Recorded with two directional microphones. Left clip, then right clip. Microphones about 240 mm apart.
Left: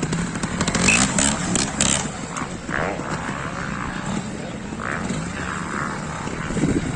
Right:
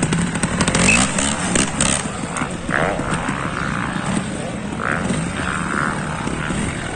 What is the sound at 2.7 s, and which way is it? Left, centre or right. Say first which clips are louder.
Clip-clop: right 5 dB; right.